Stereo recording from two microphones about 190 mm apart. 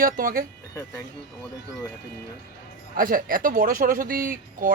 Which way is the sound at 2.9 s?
45° right (ahead or behind).